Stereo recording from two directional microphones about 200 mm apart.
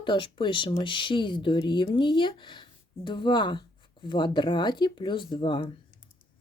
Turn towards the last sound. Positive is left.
turn(degrees=25)  # may be behind; listen again after turning